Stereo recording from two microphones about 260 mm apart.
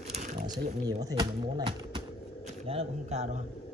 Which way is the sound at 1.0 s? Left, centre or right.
Centre.